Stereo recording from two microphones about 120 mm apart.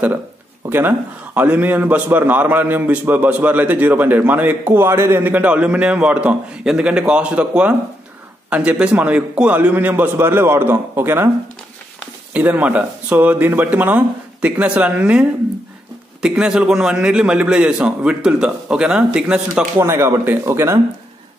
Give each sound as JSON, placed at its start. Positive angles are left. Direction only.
{"t": 0.7, "sound": "a man's voice", "side_deg": -15}
{"t": 12.4, "sound": "a man's voice", "side_deg": -10}
{"t": 19.8, "sound": "speech", "side_deg": -20}